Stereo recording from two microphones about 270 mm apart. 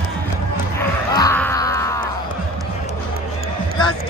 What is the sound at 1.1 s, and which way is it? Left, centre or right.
Music, centre.